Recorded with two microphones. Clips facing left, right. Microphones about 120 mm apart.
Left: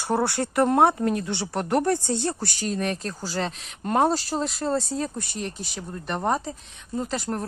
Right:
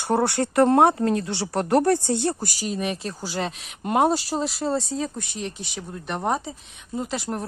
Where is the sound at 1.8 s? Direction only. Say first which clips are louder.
Right 3 dB; 55° right (ahead or behind).